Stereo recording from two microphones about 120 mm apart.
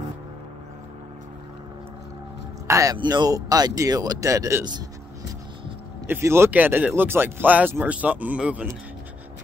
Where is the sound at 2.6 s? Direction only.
25° right (ahead or behind).